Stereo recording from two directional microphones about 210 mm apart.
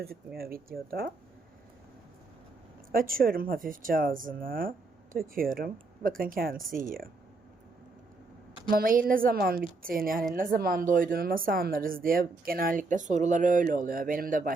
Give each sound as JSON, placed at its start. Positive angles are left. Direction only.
{"t": 0.3, "sound": "speech", "side_deg": -45}
{"t": 2.9, "sound": "speech", "side_deg": -45}
{"t": 8.7, "sound": "speech", "side_deg": -45}